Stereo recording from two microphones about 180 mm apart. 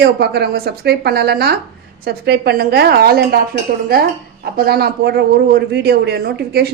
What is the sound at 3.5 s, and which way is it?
Speech, 50° right (ahead or behind).